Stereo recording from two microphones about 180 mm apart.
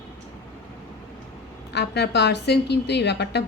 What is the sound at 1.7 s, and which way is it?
Speech, 70° left (ahead or behind).